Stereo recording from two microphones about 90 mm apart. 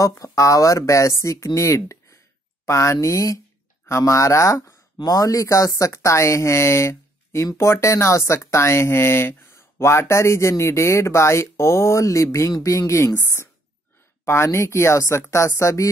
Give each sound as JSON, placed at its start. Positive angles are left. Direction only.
{"t": 0.0, "sound": "speech", "side_deg": 35}
{"t": 14.2, "sound": "speech", "side_deg": 30}